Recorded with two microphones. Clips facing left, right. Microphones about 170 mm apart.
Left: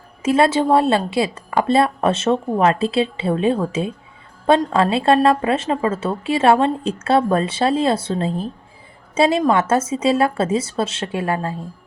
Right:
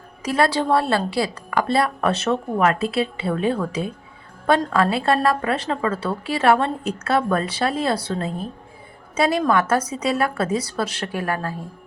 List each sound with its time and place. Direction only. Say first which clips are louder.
0.2 s a woman's voice: left 4 dB; 25° left (ahead or behind)